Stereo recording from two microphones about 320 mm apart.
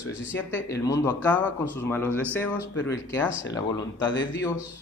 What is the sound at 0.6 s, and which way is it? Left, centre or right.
Speech, centre.